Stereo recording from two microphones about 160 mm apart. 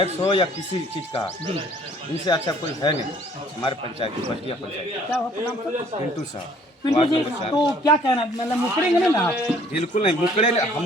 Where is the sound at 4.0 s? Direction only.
35° left (ahead or behind).